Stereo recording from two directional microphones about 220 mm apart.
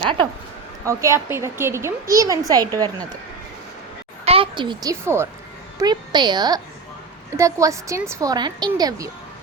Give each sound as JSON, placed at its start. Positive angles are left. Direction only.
{"t": 0.0, "sound": "a woman's voice", "side_deg": -20}
{"t": 4.3, "sound": "a woman's voice", "side_deg": -25}